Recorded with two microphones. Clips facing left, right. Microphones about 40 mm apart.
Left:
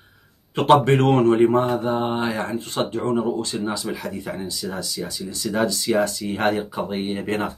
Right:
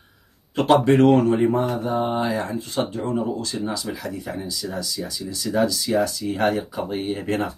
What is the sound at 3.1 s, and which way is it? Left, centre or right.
Speech, left.